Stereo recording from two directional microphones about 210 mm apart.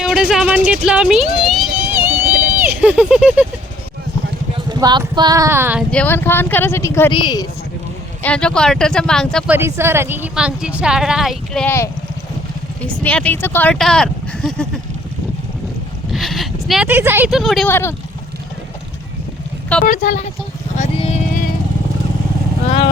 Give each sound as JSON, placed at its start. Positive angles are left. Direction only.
{"t": 0.0, "sound": "a sound", "side_deg": -5}
{"t": 4.5, "sound": "speech", "side_deg": -20}
{"t": 5.9, "sound": "speech", "side_deg": 10}
{"t": 8.2, "sound": "a woman's voice", "side_deg": 5}
{"t": 9.5, "sound": "a woman's voice", "side_deg": -10}
{"t": 16.1, "sound": "speech", "side_deg": 0}
{"t": 19.8, "sound": "speech", "side_deg": 40}
{"t": 20.7, "sound": "vehicle", "side_deg": 30}